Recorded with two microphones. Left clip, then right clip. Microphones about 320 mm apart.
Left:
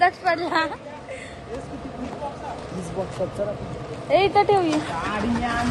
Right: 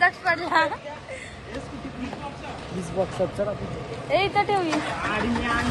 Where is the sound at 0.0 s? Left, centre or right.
Centre.